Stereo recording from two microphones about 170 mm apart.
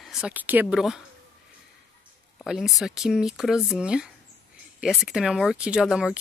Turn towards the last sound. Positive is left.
turn(degrees=-5)  # may be behind; listen again after turning